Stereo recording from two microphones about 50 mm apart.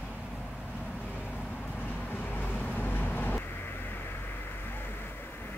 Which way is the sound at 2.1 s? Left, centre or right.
Left.